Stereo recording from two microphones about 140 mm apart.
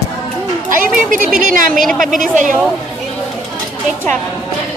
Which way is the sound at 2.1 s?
70° right (ahead or behind).